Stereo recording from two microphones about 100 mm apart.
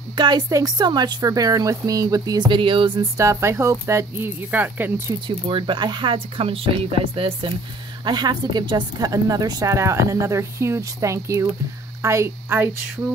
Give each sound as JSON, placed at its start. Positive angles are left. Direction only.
{"t": 0.5, "sound": "a woman's voice", "side_deg": -35}
{"t": 3.2, "sound": "speech", "side_deg": -30}
{"t": 5.5, "sound": "speech", "side_deg": -55}
{"t": 8.0, "sound": "a woman's voice", "side_deg": -45}